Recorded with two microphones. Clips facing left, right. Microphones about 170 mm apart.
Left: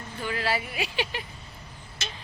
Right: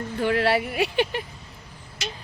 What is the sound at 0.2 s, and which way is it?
Speech, 65° right (ahead or behind).